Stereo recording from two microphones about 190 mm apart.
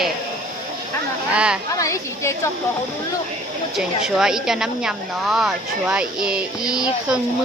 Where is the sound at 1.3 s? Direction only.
5° right (ahead or behind).